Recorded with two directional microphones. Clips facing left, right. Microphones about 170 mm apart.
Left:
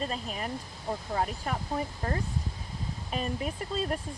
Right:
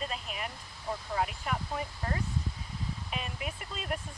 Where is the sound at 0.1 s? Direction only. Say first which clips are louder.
Left 5 dB; 35° left (ahead or behind).